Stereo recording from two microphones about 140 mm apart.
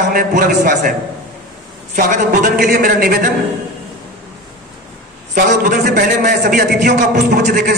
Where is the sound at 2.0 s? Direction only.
75° right (ahead or behind); by 3.3 s 90° right.